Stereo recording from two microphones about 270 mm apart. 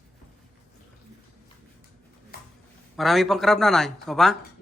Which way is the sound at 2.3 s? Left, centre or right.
Left.